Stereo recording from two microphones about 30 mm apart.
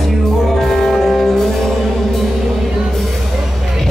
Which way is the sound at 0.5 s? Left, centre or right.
Centre.